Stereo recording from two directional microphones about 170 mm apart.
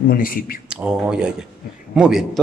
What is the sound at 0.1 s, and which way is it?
Speech, 55° left (ahead or behind).